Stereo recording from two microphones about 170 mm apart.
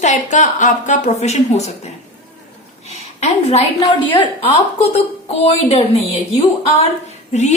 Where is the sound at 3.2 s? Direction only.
40° left (ahead or behind).